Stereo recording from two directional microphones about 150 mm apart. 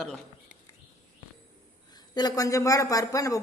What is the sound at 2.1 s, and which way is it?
Speech, 25° left (ahead or behind).